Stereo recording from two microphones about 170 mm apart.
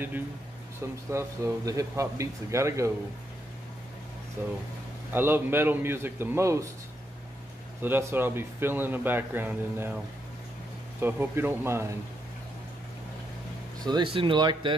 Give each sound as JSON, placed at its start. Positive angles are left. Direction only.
{"t": 1.1, "sound": "a man's voice", "side_deg": -20}
{"t": 4.4, "sound": "a man's voice", "side_deg": -10}
{"t": 7.8, "sound": "a man's voice", "side_deg": -10}
{"t": 11.0, "sound": "a man's voice", "side_deg": -15}
{"t": 13.8, "sound": "speech", "side_deg": -30}